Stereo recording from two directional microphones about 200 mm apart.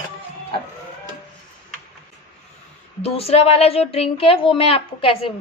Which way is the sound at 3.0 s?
30° left (ahead or behind).